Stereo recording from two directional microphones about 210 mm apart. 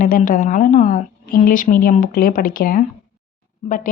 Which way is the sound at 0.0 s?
40° left (ahead or behind).